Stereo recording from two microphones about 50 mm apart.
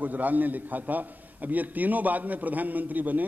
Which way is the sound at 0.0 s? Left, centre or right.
Right.